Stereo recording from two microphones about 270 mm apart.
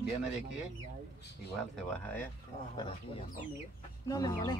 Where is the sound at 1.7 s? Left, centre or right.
Centre.